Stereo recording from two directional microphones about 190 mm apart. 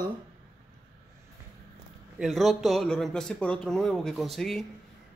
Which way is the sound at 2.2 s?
Centre (ahead or behind).